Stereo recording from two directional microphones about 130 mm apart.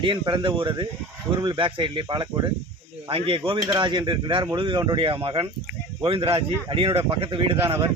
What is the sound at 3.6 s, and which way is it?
Speech, 35° right (ahead or behind).